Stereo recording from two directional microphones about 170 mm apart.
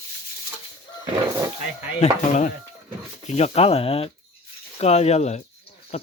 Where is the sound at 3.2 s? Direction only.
40° left (ahead or behind).